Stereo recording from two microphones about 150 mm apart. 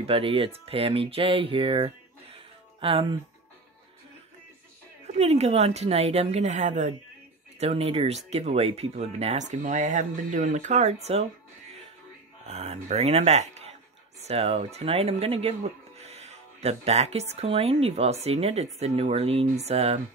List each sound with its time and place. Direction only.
0.0 s speech: 40° right (ahead or behind)
2.3 s music: 40° right (ahead or behind)
5.0 s speech: 45° right (ahead or behind)
7.5 s speech: 45° right (ahead or behind)
12.4 s speech: 45° right (ahead or behind)